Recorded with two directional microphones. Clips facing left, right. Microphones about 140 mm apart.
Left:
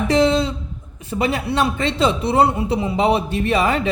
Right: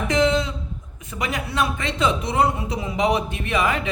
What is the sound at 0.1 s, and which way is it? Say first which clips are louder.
A man's voice: left 3 dB; 30° left (ahead or behind).